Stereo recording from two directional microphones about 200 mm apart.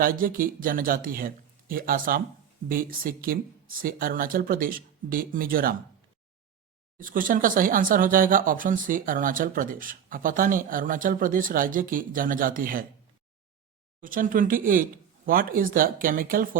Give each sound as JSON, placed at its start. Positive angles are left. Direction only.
{"t": 0.0, "sound": "speech", "side_deg": -45}
{"t": 7.0, "sound": "speech", "side_deg": -45}
{"t": 14.0, "sound": "speech", "side_deg": -45}